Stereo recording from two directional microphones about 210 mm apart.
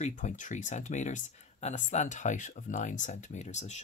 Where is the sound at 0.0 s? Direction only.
35° left (ahead or behind).